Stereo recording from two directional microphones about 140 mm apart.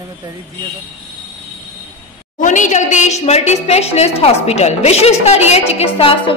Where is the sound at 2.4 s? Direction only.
65° left (ahead or behind).